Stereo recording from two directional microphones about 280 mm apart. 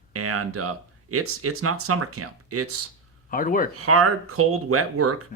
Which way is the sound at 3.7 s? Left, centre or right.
Right.